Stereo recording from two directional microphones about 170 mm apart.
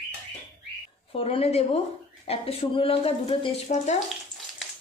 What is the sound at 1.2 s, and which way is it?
Speech, 35° left (ahead or behind).